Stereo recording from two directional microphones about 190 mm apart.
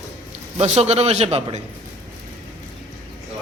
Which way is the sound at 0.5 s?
35° right (ahead or behind).